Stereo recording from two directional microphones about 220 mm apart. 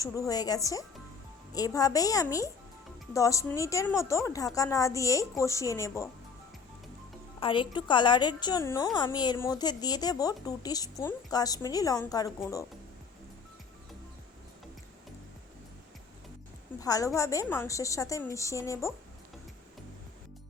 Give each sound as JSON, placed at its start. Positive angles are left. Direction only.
{"t": 0.0, "sound": "speech", "side_deg": 15}
{"t": 7.3, "sound": "a woman's voice", "side_deg": 25}
{"t": 16.8, "sound": "speech", "side_deg": 15}